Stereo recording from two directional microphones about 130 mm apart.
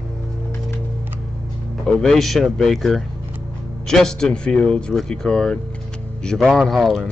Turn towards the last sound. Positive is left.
turn(degrees=0)  # may be behind; listen again after turning